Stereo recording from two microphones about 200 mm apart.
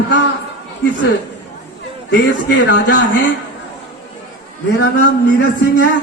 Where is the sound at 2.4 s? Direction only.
70° left (ahead or behind).